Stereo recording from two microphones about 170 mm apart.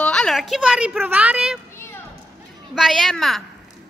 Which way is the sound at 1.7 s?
15° left (ahead or behind).